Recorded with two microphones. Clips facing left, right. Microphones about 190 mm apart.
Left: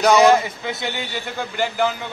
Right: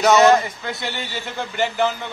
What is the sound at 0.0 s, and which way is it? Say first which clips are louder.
A man's voice: even; centre (ahead or behind).